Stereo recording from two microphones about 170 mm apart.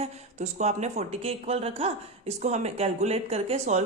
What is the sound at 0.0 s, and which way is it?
Speech, 40° right (ahead or behind).